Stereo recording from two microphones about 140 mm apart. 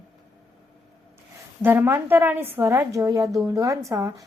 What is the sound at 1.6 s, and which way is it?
A woman's voice, 15° right (ahead or behind).